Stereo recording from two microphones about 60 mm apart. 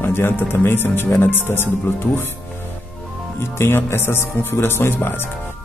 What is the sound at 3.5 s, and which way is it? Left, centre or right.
Speech, left.